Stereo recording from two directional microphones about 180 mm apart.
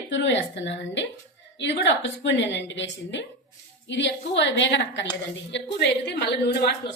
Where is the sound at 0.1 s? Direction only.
85° left.